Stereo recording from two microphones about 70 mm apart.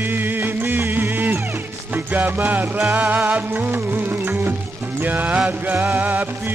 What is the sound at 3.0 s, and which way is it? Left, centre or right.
Music, right.